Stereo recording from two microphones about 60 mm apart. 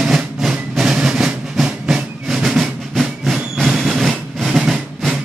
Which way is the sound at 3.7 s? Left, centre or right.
Centre.